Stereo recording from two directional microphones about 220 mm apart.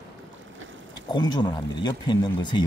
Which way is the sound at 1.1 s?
20° left (ahead or behind).